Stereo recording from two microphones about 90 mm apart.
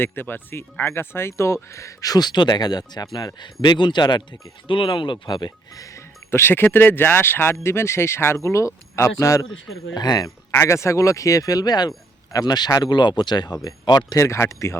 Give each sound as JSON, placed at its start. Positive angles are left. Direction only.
{"t": 0.0, "sound": "speech", "side_deg": 25}
{"t": 4.7, "sound": "speech", "side_deg": 65}
{"t": 5.5, "sound": "speech", "side_deg": 40}
{"t": 9.9, "sound": "speech", "side_deg": 50}
{"t": 10.5, "sound": "speech", "side_deg": 35}
{"t": 14.3, "sound": "speech", "side_deg": 30}